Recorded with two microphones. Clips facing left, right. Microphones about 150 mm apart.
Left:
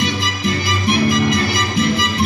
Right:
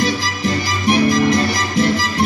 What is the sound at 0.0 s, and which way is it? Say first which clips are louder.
Music: right 1 dB; 40° right (ahead or behind).